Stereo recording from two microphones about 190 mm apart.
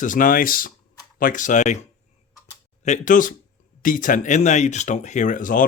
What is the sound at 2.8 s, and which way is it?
Speech, 40° left (ahead or behind).